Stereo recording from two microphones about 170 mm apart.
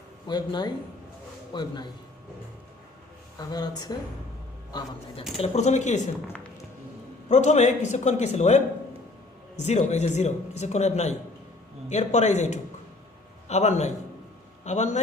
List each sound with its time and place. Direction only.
0.3 s speech: 25° left (ahead or behind)
3.3 s speech: 25° left (ahead or behind)
5.4 s speech: 40° left (ahead or behind)
6.2 s a sound: 15° left (ahead or behind)
7.3 s a man's voice: 45° left (ahead or behind)